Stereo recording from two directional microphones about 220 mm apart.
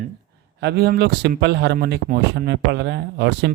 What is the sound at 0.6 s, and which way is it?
A man's voice, 50° right (ahead or behind).